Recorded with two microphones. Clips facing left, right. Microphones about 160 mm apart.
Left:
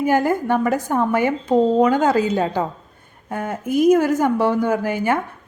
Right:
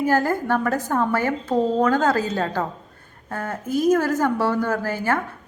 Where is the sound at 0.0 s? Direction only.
15° left (ahead or behind).